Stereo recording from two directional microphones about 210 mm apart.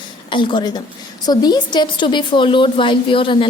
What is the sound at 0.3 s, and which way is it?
A woman's voice, 25° left (ahead or behind).